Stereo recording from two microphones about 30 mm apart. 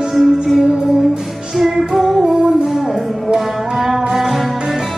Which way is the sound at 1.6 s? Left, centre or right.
Centre.